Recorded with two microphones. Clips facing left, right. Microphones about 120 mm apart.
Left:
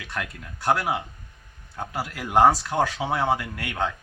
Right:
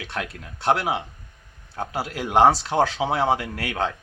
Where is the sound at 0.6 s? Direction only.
25° right (ahead or behind).